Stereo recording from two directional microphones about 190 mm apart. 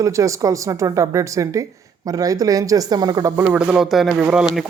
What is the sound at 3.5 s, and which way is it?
Speech, 5° right (ahead or behind).